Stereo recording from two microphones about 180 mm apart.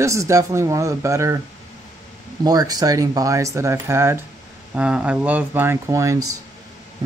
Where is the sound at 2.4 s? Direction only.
20° right (ahead or behind).